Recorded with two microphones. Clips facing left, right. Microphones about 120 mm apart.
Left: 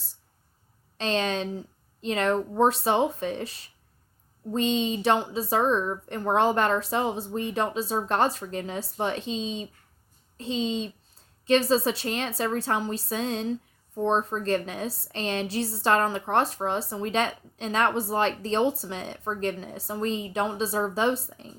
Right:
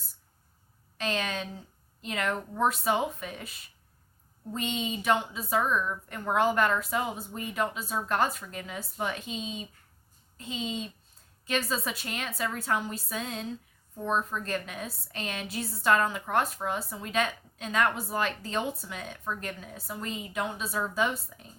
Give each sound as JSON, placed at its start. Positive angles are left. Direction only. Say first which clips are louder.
{"t": 0.9, "sound": "a woman's voice", "louder": "left 5 dB", "side_deg": 30}